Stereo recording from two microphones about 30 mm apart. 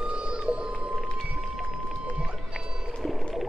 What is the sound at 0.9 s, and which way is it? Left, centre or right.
Whale vocalization, centre.